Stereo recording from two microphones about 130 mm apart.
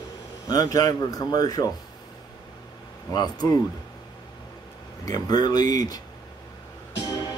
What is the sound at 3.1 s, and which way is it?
Speech, 30° left (ahead or behind).